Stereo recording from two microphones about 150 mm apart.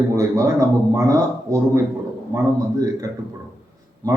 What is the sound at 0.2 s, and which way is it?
A man's voice, 20° right (ahead or behind).